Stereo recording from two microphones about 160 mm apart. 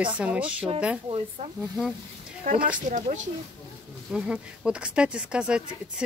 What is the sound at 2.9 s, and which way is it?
Speech, 50° right (ahead or behind).